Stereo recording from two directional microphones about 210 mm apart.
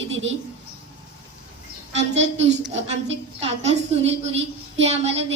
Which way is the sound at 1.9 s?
60° right (ahead or behind).